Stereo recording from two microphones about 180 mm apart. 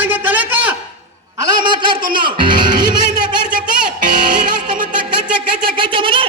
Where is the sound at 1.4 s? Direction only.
25° right (ahead or behind).